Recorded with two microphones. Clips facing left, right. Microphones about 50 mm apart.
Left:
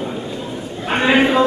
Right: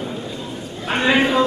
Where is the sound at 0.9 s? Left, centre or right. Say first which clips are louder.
Left 2 dB; centre.